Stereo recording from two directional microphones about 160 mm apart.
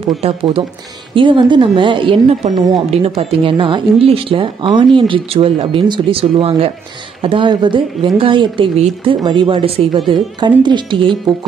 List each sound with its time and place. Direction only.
0.2 s speech: 35° right (ahead or behind)